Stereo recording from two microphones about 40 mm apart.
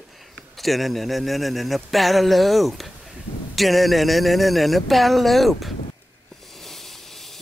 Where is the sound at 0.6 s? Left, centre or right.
Centre.